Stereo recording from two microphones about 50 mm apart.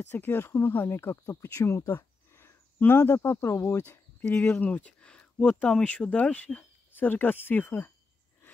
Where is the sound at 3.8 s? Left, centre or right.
Left.